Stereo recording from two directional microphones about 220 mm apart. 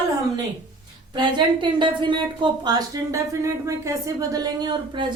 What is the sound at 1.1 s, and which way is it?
Speech, 20° right (ahead or behind).